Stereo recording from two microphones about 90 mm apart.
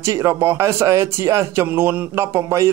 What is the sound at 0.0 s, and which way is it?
A man's voice, 30° right (ahead or behind).